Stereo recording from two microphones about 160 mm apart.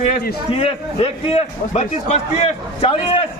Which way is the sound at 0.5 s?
35° left (ahead or behind).